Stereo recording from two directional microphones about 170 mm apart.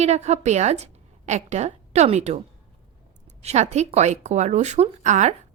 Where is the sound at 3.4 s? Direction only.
40° right (ahead or behind).